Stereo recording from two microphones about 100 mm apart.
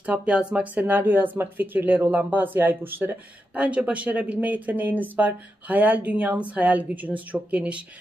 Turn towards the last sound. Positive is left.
turn(degrees=-10)  # may be behind; listen again after turning